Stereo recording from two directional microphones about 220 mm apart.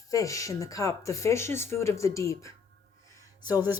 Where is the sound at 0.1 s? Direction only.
15° left (ahead or behind).